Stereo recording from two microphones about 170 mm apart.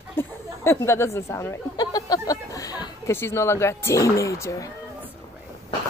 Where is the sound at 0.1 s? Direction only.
15° left (ahead or behind).